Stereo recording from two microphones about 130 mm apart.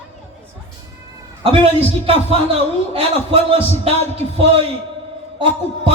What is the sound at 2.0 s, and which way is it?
A man's voice, 45° right (ahead or behind).